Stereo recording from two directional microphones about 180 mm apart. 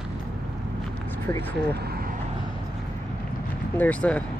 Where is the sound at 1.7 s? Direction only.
60° right (ahead or behind).